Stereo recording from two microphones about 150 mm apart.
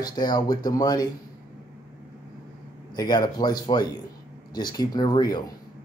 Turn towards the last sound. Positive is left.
turn(degrees=25)  # may be behind; listen again after turning